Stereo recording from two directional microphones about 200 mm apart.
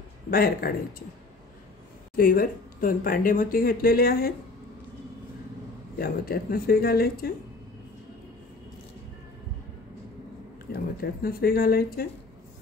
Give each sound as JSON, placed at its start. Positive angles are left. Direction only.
{"t": 0.3, "sound": "speech", "side_deg": 50}
{"t": 2.1, "sound": "speech", "side_deg": 45}
{"t": 5.9, "sound": "speech", "side_deg": 50}
{"t": 10.7, "sound": "speech", "side_deg": 50}